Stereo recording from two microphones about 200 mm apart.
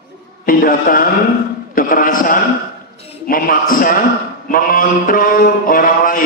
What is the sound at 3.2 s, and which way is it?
A man's voice, 45° left (ahead or behind).